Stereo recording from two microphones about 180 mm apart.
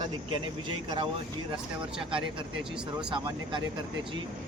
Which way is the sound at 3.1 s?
25° right (ahead or behind).